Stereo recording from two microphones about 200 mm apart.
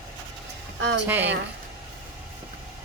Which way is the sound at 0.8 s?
60° right (ahead or behind).